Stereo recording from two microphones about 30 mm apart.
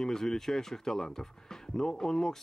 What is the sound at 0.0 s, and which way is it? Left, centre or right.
Speech, centre.